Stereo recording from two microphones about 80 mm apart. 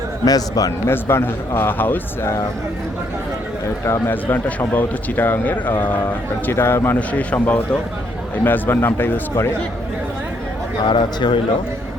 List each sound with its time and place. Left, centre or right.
0.3 s a man's voice: left
0.9 s a man's voice: left
3.8 s a man's voice: left
4.1 s a man's voice: left
7.1 s a man's voice: centre
10.8 s a man's voice: left